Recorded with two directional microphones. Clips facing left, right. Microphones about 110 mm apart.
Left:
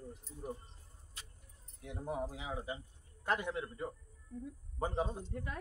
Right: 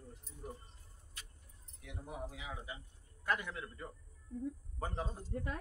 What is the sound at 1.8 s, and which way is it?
Speech, 35° left (ahead or behind).